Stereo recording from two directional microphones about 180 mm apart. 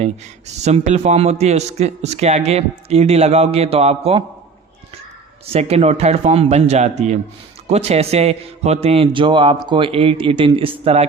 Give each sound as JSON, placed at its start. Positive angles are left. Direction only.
{"t": 0.0, "sound": "a man's voice", "side_deg": -40}
{"t": 5.5, "sound": "a man's voice", "side_deg": -35}